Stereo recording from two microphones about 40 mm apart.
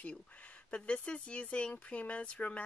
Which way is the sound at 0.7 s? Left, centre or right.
Left.